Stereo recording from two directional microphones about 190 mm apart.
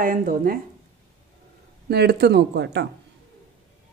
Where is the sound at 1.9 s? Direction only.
60° right (ahead or behind).